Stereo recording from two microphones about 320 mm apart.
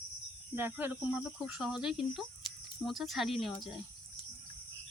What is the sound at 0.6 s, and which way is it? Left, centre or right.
Speech, centre.